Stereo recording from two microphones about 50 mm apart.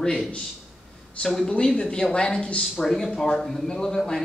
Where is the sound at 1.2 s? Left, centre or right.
Left.